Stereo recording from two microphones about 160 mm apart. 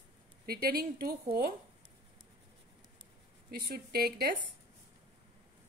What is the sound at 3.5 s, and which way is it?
Speech, 70° right (ahead or behind).